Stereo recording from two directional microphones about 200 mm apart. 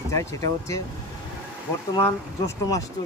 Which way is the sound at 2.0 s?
15° left (ahead or behind).